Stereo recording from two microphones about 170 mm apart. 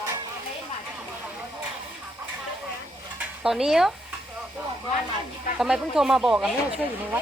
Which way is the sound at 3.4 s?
5° right (ahead or behind).